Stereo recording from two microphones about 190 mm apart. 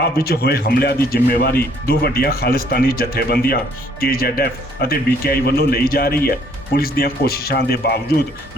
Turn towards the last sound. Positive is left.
turn(degrees=60)  # may be behind; listen again after turning